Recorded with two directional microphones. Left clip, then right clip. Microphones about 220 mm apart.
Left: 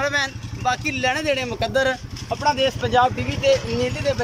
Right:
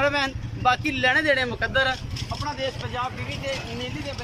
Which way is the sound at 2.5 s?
45° left (ahead or behind).